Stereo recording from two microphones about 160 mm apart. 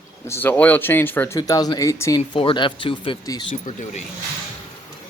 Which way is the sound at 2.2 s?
35° left (ahead or behind).